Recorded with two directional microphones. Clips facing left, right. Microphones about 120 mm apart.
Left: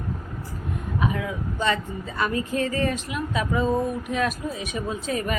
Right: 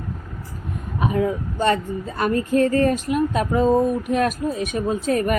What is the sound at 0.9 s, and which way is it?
Speech, 45° right (ahead or behind).